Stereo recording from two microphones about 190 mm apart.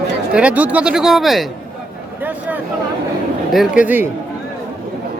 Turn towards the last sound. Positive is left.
turn(degrees=-10)  # may be behind; listen again after turning